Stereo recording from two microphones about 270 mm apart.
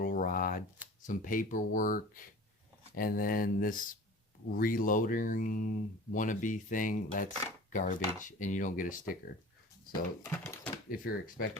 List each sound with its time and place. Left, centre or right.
0.0 s a sound: left
1.0 s speech: left
10.2 s speech: centre
10.8 s speech: left